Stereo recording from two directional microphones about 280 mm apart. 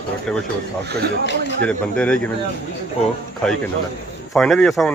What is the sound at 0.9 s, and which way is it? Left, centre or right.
Speech, right.